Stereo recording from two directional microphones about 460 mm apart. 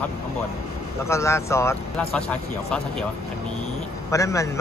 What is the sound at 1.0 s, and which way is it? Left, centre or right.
Speech, centre.